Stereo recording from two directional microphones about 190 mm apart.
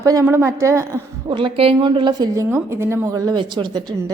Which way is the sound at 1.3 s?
30° right (ahead or behind).